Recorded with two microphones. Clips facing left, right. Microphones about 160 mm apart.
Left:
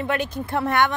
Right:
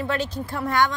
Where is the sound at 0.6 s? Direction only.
60° left (ahead or behind).